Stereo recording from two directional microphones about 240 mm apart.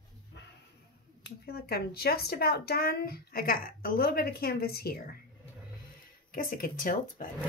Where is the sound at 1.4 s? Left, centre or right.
Left.